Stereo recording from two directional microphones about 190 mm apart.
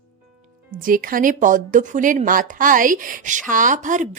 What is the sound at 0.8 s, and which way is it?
A woman's voice, 50° right (ahead or behind).